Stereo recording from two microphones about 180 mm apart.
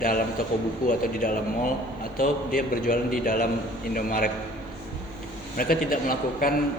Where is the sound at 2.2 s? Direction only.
50° left (ahead or behind).